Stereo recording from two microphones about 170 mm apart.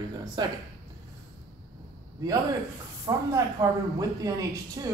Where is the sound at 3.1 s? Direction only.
20° right (ahead or behind).